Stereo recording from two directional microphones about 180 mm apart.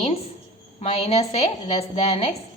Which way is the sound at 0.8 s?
35° left (ahead or behind).